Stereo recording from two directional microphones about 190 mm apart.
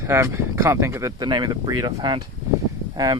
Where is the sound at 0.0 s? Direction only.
15° right (ahead or behind).